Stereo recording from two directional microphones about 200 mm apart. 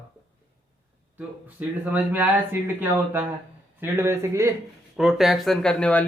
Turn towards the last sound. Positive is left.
turn(degrees=5)  # may be behind; listen again after turning